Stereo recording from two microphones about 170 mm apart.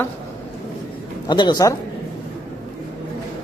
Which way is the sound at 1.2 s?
25° left (ahead or behind).